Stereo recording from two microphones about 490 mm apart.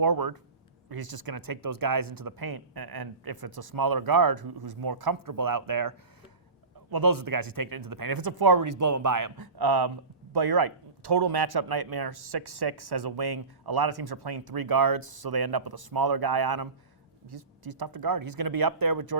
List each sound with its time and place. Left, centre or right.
0.0 s speech: right
6.9 s speech: right